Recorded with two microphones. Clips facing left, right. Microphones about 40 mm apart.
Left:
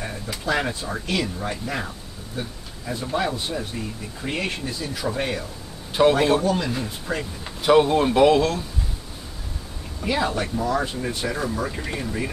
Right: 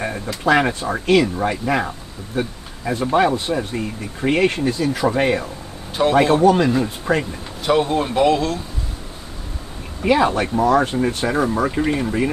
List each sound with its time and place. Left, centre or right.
0.5 s speech: right
6.0 s speech: centre
6.4 s speech: right
7.6 s speech: centre
10.0 s speech: right
10.6 s speech: right